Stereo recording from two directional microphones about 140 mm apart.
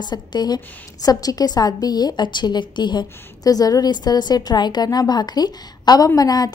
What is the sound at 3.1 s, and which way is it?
A woman's voice, 20° left (ahead or behind).